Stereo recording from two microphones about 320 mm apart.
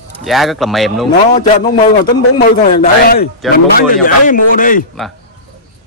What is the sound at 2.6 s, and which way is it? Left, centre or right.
A man's voice, left.